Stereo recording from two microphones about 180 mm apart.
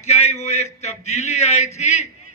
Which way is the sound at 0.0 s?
40° left (ahead or behind).